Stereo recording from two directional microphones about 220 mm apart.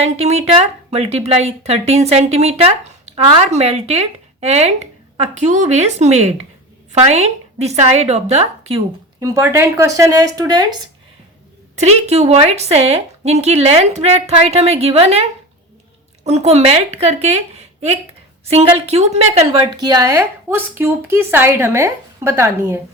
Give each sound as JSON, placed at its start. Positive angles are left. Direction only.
{"t": 0.0, "sound": "speech", "side_deg": -30}
{"t": 9.2, "sound": "a woman's voice", "side_deg": -15}
{"t": 11.8, "sound": "a woman's voice", "side_deg": -30}
{"t": 19.7, "sound": "a woman's voice", "side_deg": -15}